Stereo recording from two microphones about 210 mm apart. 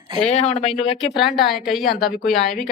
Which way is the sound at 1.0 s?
Centre (ahead or behind).